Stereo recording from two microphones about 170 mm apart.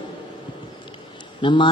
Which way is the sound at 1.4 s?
30° left (ahead or behind).